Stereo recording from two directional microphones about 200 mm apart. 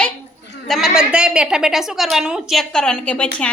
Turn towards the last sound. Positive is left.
turn(degrees=5)  # may be behind; listen again after turning